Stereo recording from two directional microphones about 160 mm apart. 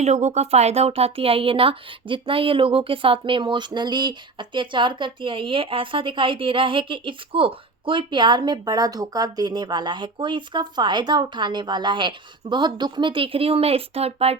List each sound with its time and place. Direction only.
0.0 s speech: 45° right (ahead or behind)